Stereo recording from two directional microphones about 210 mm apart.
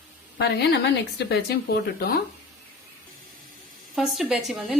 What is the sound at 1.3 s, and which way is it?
Speech, 50° left (ahead or behind).